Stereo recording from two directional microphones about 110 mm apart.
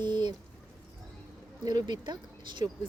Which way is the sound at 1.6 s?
40° right (ahead or behind).